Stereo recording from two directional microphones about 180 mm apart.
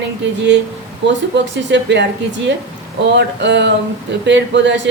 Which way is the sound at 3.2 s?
75° right (ahead or behind).